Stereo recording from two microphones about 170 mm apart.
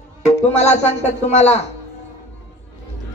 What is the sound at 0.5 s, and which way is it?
Speech, 40° left (ahead or behind).